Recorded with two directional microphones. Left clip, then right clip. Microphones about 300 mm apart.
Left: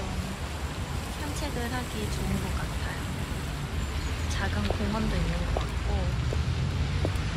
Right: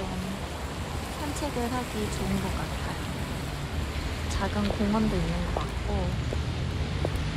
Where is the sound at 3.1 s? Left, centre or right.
Right.